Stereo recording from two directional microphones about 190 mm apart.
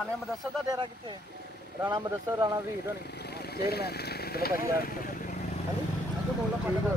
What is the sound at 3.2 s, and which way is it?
Speech, 55° left (ahead or behind).